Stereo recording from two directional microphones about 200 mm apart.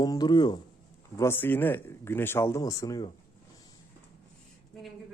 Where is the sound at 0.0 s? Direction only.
20° left (ahead or behind).